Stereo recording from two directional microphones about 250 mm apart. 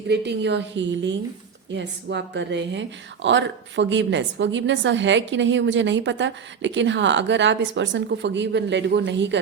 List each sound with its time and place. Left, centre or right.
0.1 s a woman's voice: right